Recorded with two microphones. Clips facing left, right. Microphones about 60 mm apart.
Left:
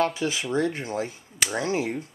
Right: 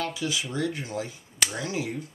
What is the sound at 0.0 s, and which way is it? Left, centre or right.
Speech, left.